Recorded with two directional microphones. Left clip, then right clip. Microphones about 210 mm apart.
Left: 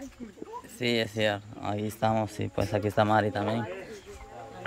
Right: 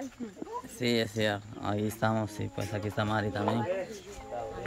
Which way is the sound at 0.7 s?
10° left (ahead or behind).